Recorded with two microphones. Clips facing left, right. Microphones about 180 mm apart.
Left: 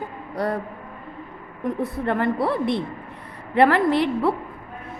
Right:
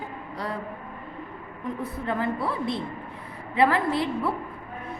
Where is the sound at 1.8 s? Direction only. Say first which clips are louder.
Left 5 dB; 65° left (ahead or behind).